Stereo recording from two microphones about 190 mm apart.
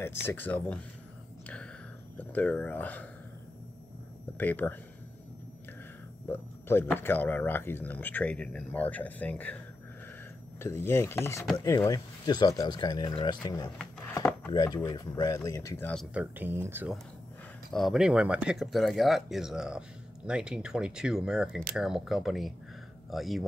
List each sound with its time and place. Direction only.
0.0 s speech: 15° left (ahead or behind)
2.1 s speech: 10° left (ahead or behind)
4.4 s speech: 10° left (ahead or behind)
6.3 s speech: 10° left (ahead or behind)
10.6 s speech: 15° left (ahead or behind)
14.1 s chopping: 10° left (ahead or behind)
14.5 s speech: 20° left (ahead or behind)
16.1 s speech: 10° right (ahead or behind)
17.6 s speech: centre (ahead or behind)